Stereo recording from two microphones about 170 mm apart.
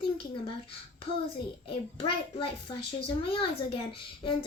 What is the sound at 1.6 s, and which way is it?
Speech, 30° left (ahead or behind).